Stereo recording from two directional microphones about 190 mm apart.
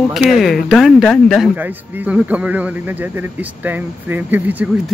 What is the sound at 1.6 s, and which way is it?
Speech, 10° right (ahead or behind).